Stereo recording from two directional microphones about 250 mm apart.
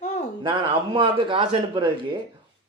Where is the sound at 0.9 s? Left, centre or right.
Right.